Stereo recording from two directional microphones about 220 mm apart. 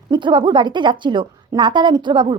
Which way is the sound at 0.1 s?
20° right (ahead or behind).